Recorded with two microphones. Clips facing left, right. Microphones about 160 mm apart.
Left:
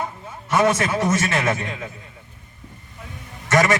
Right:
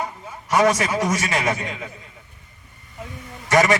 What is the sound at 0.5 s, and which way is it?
A man's voice, 10° right (ahead or behind).